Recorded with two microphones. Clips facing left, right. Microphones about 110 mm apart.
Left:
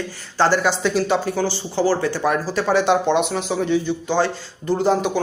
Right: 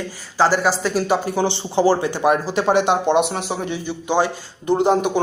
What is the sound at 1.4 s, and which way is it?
Speech, 20° right (ahead or behind).